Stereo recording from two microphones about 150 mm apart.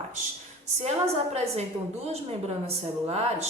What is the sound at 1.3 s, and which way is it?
Speech, 45° right (ahead or behind).